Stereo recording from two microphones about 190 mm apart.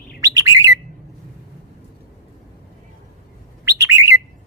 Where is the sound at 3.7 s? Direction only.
15° right (ahead or behind).